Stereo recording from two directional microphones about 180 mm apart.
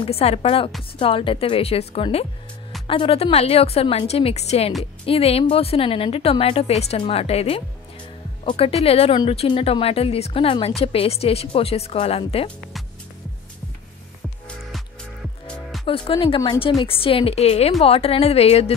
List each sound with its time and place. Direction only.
0.0 s speech: 35° left (ahead or behind)
15.8 s speech: 30° left (ahead or behind)